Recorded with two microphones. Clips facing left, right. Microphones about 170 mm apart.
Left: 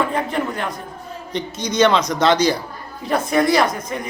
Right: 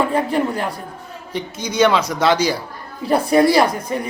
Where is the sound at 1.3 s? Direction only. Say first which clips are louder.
Left 1 dB; 5° right (ahead or behind).